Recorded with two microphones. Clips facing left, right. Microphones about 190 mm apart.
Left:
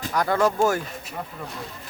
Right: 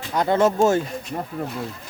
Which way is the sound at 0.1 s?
20° right (ahead or behind).